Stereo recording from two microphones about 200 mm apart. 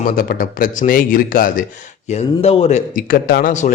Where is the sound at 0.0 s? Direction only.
45° left (ahead or behind).